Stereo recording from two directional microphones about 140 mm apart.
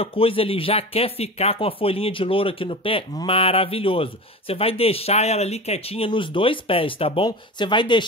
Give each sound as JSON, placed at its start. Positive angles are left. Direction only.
{"t": 0.0, "sound": "speech", "side_deg": 40}